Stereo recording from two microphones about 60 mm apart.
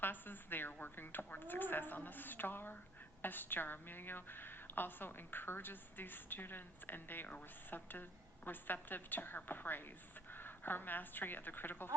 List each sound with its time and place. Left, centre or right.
0.0 s a woman's voice: left